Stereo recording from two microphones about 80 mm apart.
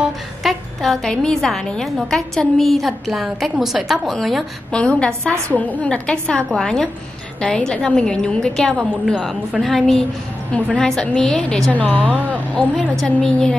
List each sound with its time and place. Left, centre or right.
0.0 s a woman's voice: centre
4.7 s a woman's voice: centre